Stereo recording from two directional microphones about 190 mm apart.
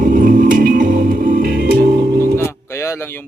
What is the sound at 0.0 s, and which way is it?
Music, 45° right (ahead or behind).